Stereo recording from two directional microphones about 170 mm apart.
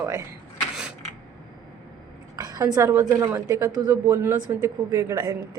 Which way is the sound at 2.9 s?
20° right (ahead or behind).